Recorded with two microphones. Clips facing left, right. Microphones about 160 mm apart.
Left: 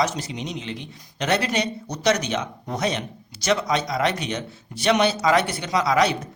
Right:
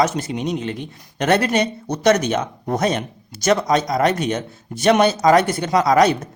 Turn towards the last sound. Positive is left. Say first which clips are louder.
# right 5 dB
turn(degrees=-45)  # may be behind; listen again after turning